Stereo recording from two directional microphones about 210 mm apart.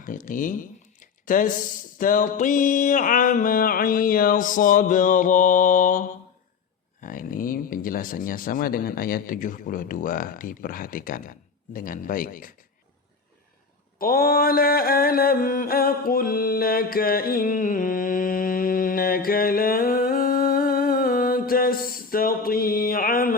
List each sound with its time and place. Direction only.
0.0 s speech: 40° left (ahead or behind)
14.0 s mantra: 45° left (ahead or behind)